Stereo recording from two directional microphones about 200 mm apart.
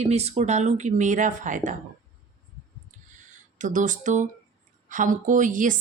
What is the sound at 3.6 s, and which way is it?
A woman's voice, 40° right (ahead or behind).